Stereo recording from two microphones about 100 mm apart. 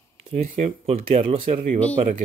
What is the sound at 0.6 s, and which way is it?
Speech, 80° right.